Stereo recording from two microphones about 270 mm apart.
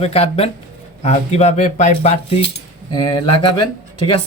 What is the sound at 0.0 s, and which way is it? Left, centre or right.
Speech, left.